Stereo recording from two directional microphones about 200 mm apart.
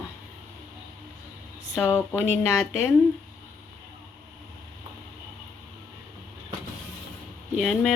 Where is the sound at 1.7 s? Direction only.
15° left (ahead or behind).